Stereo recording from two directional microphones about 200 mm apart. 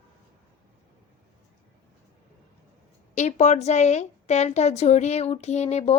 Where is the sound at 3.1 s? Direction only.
35° left (ahead or behind).